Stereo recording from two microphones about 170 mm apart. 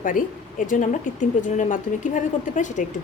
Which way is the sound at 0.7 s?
50° left (ahead or behind).